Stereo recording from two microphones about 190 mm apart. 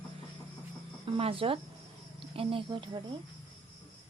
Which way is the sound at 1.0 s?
30° right (ahead or behind).